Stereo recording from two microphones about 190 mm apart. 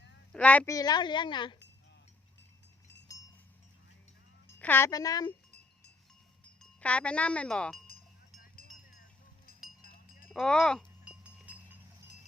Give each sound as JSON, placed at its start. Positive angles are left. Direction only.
{"t": 0.3, "sound": "a woman's voice", "side_deg": 5}
{"t": 4.4, "sound": "speech", "side_deg": 10}
{"t": 6.6, "sound": "speech", "side_deg": 5}
{"t": 9.5, "sound": "a sound", "side_deg": 50}
{"t": 9.8, "sound": "wind chime", "side_deg": 50}
{"t": 10.2, "sound": "speech", "side_deg": 0}
{"t": 11.0, "sound": "wind chime", "side_deg": -5}